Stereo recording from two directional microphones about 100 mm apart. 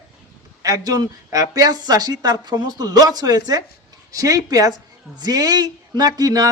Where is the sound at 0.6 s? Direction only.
40° right (ahead or behind).